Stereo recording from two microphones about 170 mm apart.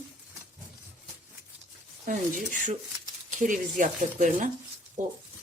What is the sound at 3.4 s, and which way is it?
Speech, 50° right (ahead or behind).